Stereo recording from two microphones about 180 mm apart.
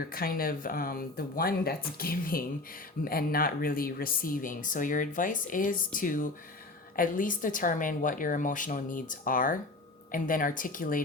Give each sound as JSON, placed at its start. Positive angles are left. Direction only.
{"t": 0.1, "sound": "speech", "side_deg": 55}